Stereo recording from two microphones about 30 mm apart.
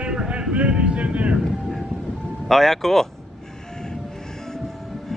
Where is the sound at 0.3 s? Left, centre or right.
Right.